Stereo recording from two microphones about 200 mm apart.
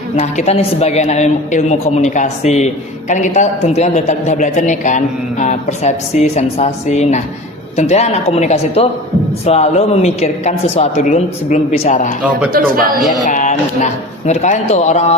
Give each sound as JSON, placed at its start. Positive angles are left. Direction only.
{"t": 0.2, "sound": "a man's voice", "side_deg": 30}
{"t": 12.5, "sound": "a man's voice", "side_deg": -45}
{"t": 13.2, "sound": "a man's voice", "side_deg": 40}